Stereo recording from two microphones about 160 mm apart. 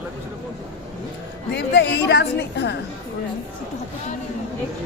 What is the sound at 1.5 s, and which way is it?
A woman's voice, 90° left.